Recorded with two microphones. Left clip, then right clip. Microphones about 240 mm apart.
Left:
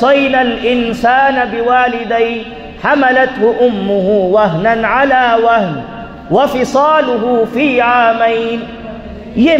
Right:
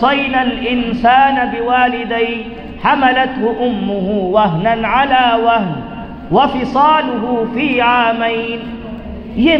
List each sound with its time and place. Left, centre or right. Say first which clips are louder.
0.0 s a man's voice: left 4 dB; left